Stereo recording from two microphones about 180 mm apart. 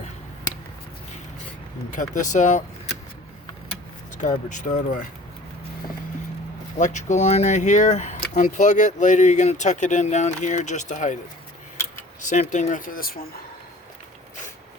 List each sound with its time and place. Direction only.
1.9 s speech: 45° left (ahead or behind)
4.2 s speech: 45° left (ahead or behind)
6.7 s speech: 45° left (ahead or behind)
12.2 s speech: 45° left (ahead or behind)